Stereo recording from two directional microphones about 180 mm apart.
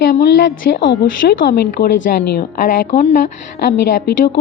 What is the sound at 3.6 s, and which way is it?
Speech, 65° left (ahead or behind).